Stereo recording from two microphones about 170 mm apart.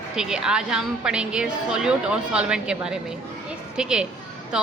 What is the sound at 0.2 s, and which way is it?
A woman's voice, 5° right (ahead or behind).